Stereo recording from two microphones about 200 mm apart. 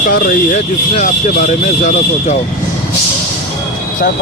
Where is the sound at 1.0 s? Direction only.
40° left (ahead or behind).